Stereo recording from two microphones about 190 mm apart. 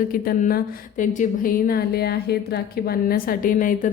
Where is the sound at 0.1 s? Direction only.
45° left (ahead or behind).